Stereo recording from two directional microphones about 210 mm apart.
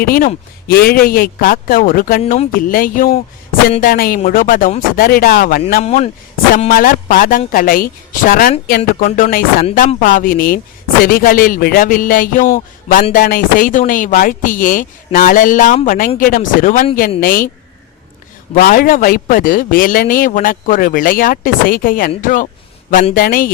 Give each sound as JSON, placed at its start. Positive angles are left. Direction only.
{"t": 0.0, "sound": "a woman's voice", "side_deg": 45}
{"t": 2.2, "sound": "speech", "side_deg": 30}
{"t": 2.5, "sound": "speech", "side_deg": 40}
{"t": 5.8, "sound": "speech", "side_deg": 30}
{"t": 6.5, "sound": "a woman's voice", "side_deg": 40}
{"t": 18.5, "sound": "speech", "side_deg": 40}